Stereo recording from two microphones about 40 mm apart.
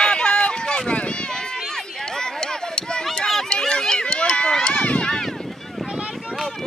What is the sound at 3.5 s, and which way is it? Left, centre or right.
Run, left.